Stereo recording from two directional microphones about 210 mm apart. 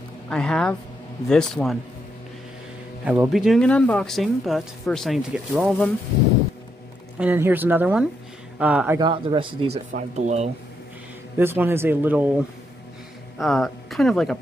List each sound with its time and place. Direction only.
0.3 s speech: 5° left (ahead or behind)
3.1 s speech: 5° right (ahead or behind)
7.2 s speech: 10° right (ahead or behind)
9.0 s speech: 25° right (ahead or behind)
9.8 s speech: 35° right (ahead or behind)
11.3 s speech: 10° right (ahead or behind)
13.4 s speech: centre (ahead or behind)